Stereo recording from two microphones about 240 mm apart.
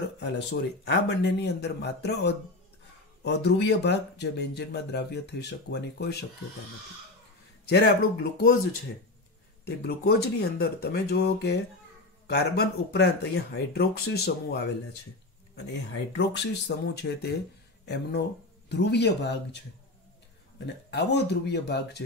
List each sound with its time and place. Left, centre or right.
0.2 s speech: left
7.6 s speech: left
9.7 s speech: left
16.2 s speech: left